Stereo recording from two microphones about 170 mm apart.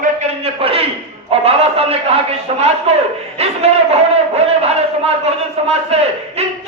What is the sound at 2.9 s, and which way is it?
Speech, 35° right (ahead or behind).